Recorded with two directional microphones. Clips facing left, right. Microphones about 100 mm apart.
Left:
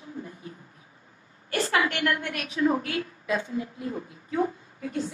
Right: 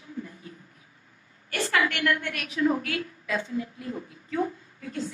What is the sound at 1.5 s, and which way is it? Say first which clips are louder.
A woman's voice: left 1 dB; 25° left (ahead or behind).